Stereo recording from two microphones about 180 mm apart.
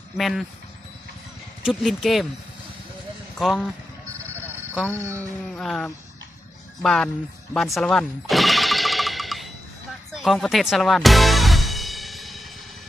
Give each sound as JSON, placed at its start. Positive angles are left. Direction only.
{"t": 0.2, "sound": "speech", "side_deg": 0}
{"t": 1.6, "sound": "speech", "side_deg": 0}
{"t": 3.4, "sound": "speech", "side_deg": 0}
{"t": 4.7, "sound": "speech", "side_deg": -5}
{"t": 7.5, "sound": "a sound", "side_deg": 0}
{"t": 10.2, "sound": "music", "side_deg": 0}